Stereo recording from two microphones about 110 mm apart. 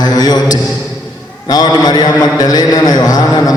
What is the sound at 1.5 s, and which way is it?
A man's voice, 40° left (ahead or behind).